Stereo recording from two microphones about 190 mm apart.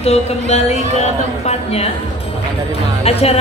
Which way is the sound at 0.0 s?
35° left (ahead or behind).